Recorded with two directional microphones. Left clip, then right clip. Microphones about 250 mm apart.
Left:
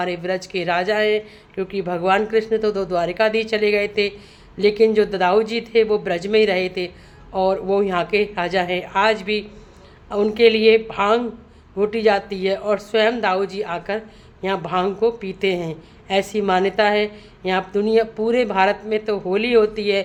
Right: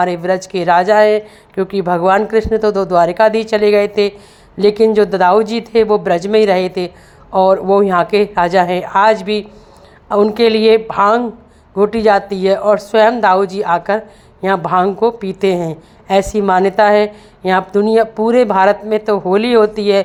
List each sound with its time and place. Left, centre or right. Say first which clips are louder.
0.0 s a woman's voice: right 8 dB; centre